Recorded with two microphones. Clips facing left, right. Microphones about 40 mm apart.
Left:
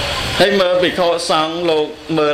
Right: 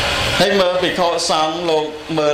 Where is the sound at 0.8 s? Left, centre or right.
Centre.